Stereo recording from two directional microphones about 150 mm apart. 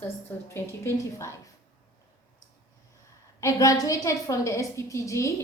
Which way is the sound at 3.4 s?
25° left (ahead or behind).